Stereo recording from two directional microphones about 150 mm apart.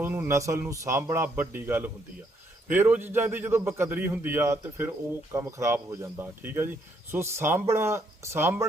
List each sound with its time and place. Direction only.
0.0 s a man's voice: 15° right (ahead or behind)